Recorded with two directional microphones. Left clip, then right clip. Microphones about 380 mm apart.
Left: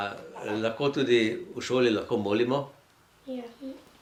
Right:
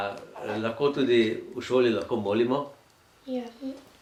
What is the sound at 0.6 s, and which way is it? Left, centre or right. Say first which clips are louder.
Speech: right 2 dB; left.